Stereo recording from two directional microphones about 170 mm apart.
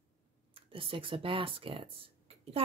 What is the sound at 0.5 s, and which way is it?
Speech, 30° right (ahead or behind).